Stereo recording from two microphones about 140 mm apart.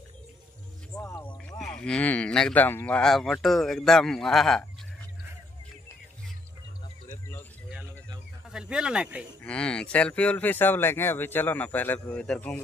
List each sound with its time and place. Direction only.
1.0 s speech: 20° left (ahead or behind)
1.6 s speech: 5° left (ahead or behind)
8.5 s speech: 5° right (ahead or behind)
9.4 s speech: 10° left (ahead or behind)